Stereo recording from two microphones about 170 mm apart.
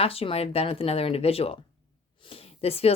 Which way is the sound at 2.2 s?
35° left (ahead or behind).